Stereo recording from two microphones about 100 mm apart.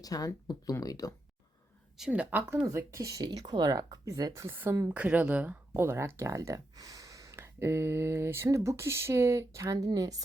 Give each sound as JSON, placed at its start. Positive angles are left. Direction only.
{"t": 0.0, "sound": "speech", "side_deg": 40}
{"t": 2.0, "sound": "speech", "side_deg": -10}
{"t": 2.6, "sound": "speech", "side_deg": -30}
{"t": 4.5, "sound": "speech", "side_deg": -20}
{"t": 9.7, "sound": "speech", "side_deg": -40}